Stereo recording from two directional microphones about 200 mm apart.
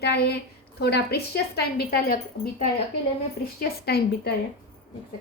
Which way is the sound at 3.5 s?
55° left (ahead or behind).